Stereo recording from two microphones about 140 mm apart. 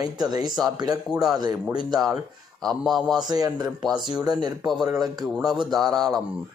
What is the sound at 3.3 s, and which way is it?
Speech, 25° right (ahead or behind).